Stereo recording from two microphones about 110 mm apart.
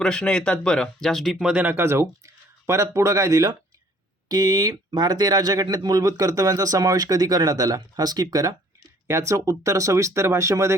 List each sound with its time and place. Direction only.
0.0 s speech: 5° left (ahead or behind); by 1.7 s 10° right (ahead or behind)
1.7 s speech: 25° right (ahead or behind)